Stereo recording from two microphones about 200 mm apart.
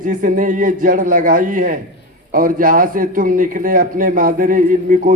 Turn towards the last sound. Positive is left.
turn(degrees=-45)  # may be behind; listen again after turning